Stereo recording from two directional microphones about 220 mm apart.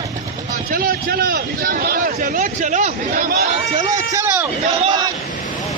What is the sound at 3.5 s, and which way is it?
Speech, 30° right (ahead or behind).